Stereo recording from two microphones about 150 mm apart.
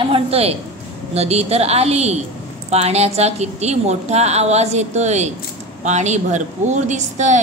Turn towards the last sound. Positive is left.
turn(degrees=-55)  # may be behind; listen again after turning